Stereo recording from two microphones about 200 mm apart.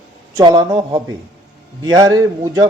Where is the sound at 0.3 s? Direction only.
15° right (ahead or behind).